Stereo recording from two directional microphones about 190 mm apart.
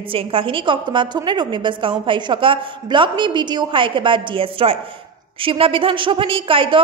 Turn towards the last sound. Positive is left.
turn(degrees=-25)  # may be behind; listen again after turning